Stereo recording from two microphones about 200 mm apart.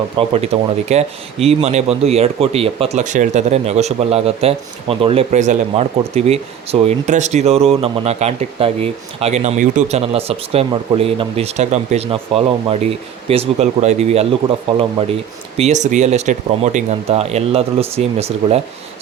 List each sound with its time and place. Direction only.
0.2 s speech: 30° right (ahead or behind)
15.5 s speech: 35° right (ahead or behind)